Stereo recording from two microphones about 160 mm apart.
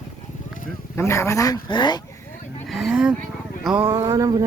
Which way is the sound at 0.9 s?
15° left (ahead or behind).